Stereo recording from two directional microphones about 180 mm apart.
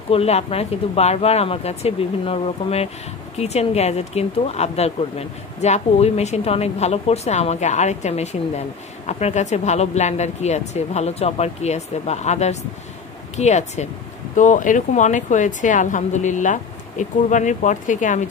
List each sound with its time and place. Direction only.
0.1 s speech: 35° left (ahead or behind)